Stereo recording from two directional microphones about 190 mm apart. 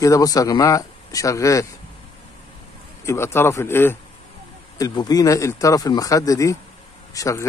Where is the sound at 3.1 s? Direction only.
15° left (ahead or behind).